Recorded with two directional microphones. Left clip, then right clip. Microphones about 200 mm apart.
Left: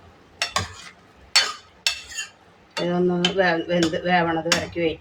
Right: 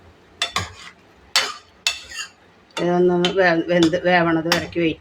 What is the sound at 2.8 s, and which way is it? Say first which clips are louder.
Speech: right 5 dB; 45° right (ahead or behind).